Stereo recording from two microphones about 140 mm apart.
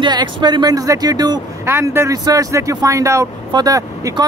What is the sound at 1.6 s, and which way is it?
Speech, 20° right (ahead or behind).